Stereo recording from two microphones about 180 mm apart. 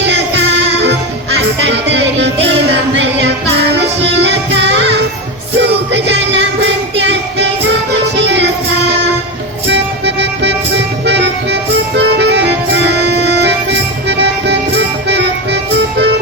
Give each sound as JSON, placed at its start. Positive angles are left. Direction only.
{"t": 0.0, "sound": "music", "side_deg": -70}
{"t": 3.8, "sound": "music", "side_deg": -75}
{"t": 9.6, "sound": "music", "side_deg": -75}